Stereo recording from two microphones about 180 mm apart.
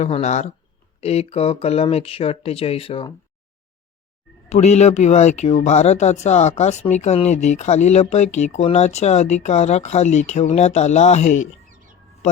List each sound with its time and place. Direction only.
0.0 s speech: 40° left (ahead or behind)
4.4 s speech: 35° left (ahead or behind)